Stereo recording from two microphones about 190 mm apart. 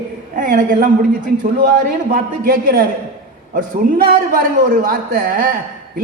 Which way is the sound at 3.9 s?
50° right (ahead or behind).